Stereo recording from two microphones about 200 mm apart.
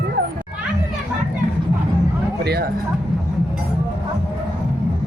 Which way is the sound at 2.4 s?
55° right (ahead or behind).